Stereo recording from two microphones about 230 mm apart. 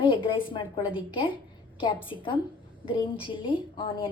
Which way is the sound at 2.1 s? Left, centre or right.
Left.